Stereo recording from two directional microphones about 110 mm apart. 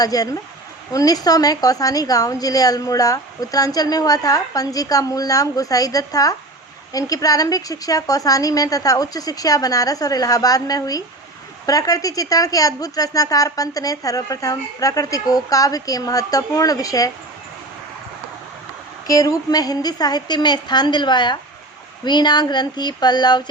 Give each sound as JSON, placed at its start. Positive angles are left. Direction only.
{"t": 0.0, "sound": "a woman's voice", "side_deg": 35}
{"t": 19.0, "sound": "a woman's voice", "side_deg": 35}